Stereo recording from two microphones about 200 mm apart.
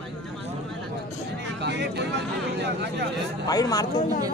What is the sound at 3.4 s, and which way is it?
Speech, 20° left (ahead or behind).